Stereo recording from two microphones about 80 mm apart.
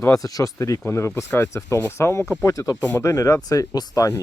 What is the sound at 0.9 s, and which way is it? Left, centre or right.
Speech, left.